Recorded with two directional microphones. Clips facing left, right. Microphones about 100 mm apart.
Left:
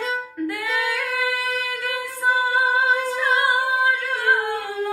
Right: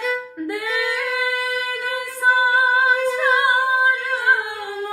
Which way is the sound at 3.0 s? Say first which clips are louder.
Right 3 dB; 20° right (ahead or behind).